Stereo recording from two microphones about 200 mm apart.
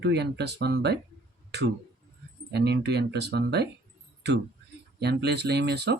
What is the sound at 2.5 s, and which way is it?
Speech, 55° right (ahead or behind).